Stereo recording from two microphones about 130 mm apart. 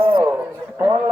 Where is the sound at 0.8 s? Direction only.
20° right (ahead or behind).